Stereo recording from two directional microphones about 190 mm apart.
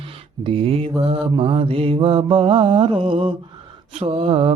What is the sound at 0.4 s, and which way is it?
Mantra, 30° right (ahead or behind).